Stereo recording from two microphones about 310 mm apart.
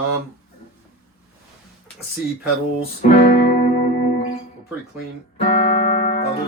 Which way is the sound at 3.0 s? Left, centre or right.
Left.